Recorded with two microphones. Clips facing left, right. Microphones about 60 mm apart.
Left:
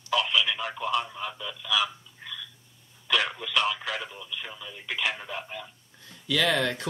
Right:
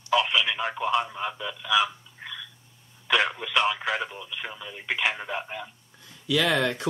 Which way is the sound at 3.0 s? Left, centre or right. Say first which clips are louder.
Right 3 dB; right.